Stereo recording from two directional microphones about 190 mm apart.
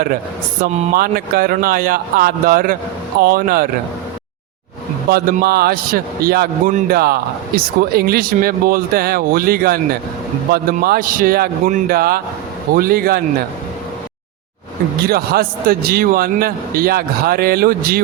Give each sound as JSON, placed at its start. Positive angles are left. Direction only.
{"t": 0.6, "sound": "speech", "side_deg": -35}
{"t": 0.9, "sound": "a man's voice", "side_deg": -50}
{"t": 5.1, "sound": "a man's voice", "side_deg": -55}
{"t": 15.0, "sound": "a man's voice", "side_deg": -55}